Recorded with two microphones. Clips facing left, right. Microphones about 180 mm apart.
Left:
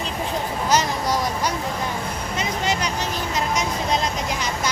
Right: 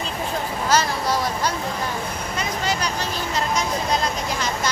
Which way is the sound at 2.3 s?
20° left (ahead or behind).